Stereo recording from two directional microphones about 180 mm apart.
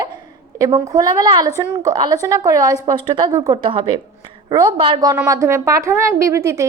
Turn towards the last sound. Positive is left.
turn(degrees=-15)  # may be behind; listen again after turning